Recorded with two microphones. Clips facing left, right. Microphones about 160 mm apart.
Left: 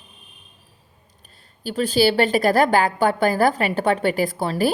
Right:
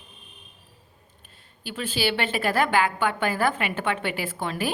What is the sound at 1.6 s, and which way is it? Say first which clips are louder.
A woman's voice: left 9 dB; 40° left (ahead or behind).